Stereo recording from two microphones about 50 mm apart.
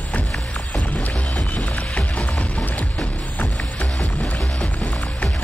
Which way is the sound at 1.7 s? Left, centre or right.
Centre.